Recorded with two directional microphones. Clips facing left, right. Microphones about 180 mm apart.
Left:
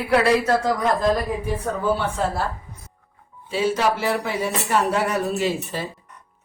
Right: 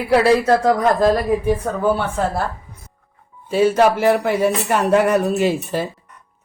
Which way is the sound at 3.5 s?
55° right (ahead or behind).